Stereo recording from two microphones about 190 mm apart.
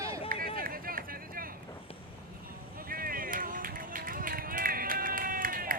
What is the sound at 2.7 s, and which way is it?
Run, 50° right (ahead or behind).